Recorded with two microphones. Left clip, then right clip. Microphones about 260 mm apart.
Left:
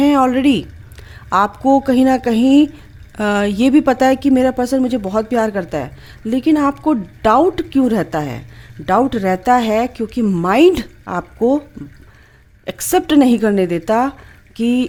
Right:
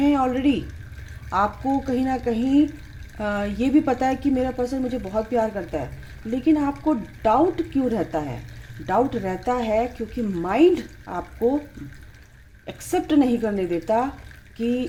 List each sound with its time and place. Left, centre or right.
0.0 s speech: left
12.6 s speech: left